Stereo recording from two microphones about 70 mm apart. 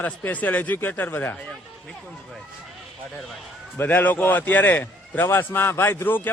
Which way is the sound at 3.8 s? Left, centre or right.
Left.